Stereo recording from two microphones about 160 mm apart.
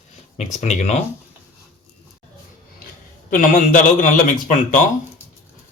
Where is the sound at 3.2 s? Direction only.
55° left (ahead or behind).